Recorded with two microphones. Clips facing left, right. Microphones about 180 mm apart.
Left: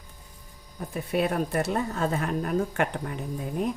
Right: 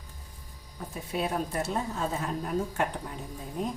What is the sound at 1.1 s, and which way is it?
Speech, 65° left (ahead or behind).